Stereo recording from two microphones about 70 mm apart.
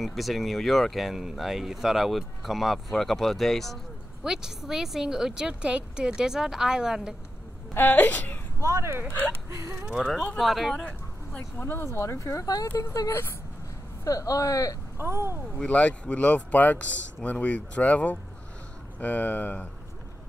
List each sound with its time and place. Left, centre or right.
0.0 s speech: centre
4.2 s a woman's voice: centre
7.7 s speech: left
8.5 s speech: right
10.4 s speech: centre
10.7 s speech: centre
11.5 s speech: left
15.0 s speech: right
15.5 s speech: centre